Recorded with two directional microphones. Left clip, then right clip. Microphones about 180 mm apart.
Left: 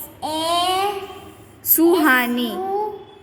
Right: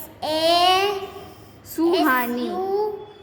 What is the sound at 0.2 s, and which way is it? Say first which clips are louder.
Child singing: right 2 dB; 10° right (ahead or behind).